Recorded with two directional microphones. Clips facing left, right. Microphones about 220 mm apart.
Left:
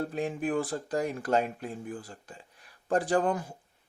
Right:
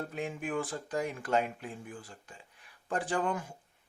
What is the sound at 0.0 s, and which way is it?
Speech, 35° left (ahead or behind).